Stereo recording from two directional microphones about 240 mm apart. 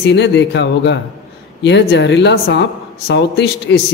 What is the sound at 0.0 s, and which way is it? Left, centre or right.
Speech, left.